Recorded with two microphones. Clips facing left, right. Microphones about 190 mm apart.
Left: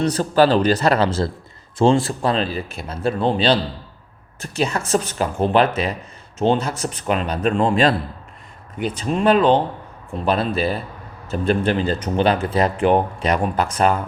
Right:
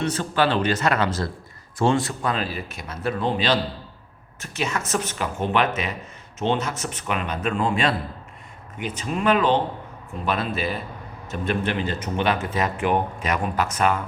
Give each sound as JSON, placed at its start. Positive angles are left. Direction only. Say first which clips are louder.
{"t": 0.0, "sound": "speech", "louder": "left 6 dB", "side_deg": 35}